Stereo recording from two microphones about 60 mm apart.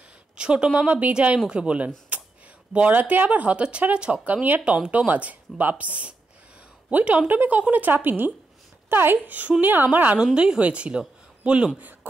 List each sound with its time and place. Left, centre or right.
0.4 s a woman's voice: centre
4.6 s a woman's voice: centre
4.9 s speech: right
10.2 s speech: centre